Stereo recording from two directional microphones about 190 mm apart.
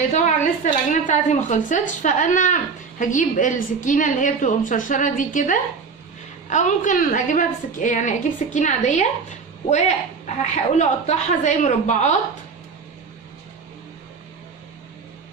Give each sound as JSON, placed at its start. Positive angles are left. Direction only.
{"t": 0.6, "sound": "a woman's voice", "side_deg": 40}